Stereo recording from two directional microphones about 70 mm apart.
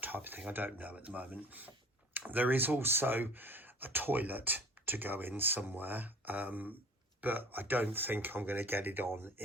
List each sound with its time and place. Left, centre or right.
0.0 s speech: right